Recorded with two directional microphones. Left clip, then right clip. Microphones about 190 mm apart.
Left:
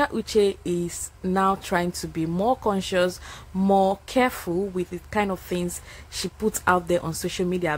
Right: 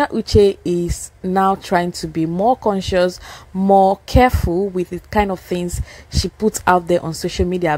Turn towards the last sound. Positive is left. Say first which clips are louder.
# right 7 dB
turn(degrees=-30)  # may be behind; listen again after turning